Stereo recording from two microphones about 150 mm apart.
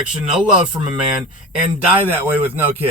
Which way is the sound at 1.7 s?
10° right (ahead or behind).